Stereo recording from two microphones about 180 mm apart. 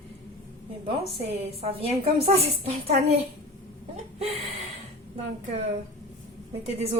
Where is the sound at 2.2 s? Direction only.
35° right (ahead or behind).